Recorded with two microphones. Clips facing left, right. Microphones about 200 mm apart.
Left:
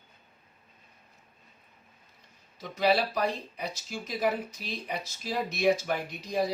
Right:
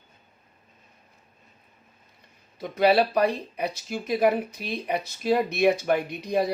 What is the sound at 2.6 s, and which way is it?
Speech, 55° right (ahead or behind).